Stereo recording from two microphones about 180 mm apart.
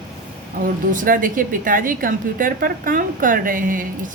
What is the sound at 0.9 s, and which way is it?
Speech, 50° right (ahead or behind).